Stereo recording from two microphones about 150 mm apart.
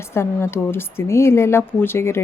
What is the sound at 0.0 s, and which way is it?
A woman's voice, 15° left (ahead or behind).